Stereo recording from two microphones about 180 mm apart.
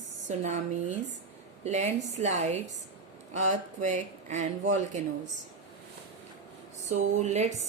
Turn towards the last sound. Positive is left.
turn(degrees=-40)  # may be behind; listen again after turning